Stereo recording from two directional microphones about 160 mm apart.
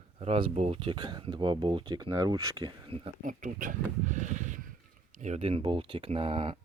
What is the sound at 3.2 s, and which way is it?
Speech, 55° right (ahead or behind).